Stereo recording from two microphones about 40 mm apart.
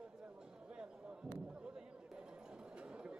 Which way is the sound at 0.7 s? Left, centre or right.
Right.